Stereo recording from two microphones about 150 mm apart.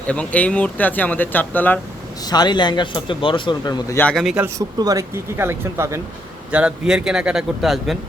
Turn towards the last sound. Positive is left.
turn(degrees=0)  # may be behind; listen again after turning